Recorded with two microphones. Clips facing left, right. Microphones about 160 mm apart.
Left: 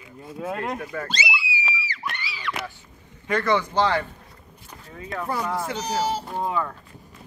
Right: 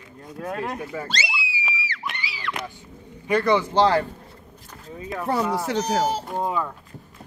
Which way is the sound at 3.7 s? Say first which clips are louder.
Right 3 dB; 35° right (ahead or behind).